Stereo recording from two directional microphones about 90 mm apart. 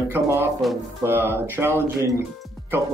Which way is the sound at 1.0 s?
25° right (ahead or behind).